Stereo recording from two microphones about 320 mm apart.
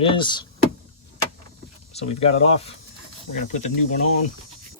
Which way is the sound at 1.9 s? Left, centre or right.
Centre.